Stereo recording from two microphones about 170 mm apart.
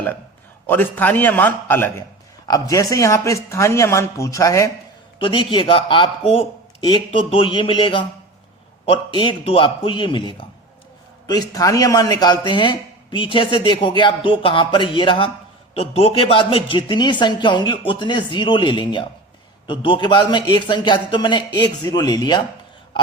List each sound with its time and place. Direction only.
0.7 s speech: 10° left (ahead or behind)
5.2 s speech: 30° left (ahead or behind)